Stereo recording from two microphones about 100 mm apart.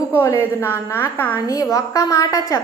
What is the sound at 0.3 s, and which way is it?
A woman's voice, 25° left (ahead or behind).